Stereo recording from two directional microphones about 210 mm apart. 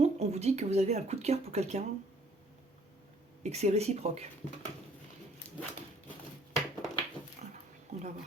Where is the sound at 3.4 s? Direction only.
30° right (ahead or behind).